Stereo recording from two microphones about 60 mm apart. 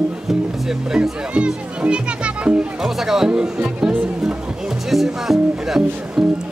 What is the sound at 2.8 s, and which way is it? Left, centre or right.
Music, centre.